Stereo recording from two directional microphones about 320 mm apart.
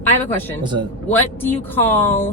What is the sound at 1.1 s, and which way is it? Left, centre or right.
Speech, centre.